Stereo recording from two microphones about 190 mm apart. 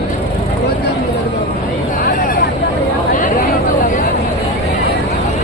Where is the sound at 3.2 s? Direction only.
45° left (ahead or behind).